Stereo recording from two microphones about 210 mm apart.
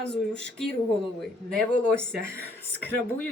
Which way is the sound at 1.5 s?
5° left (ahead or behind).